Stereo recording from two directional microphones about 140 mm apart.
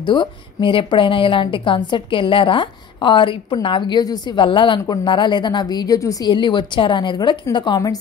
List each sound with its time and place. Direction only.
0.0 s a woman's voice: 35° left (ahead or behind)